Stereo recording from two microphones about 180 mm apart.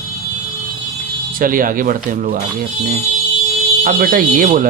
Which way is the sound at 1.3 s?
50° right (ahead or behind).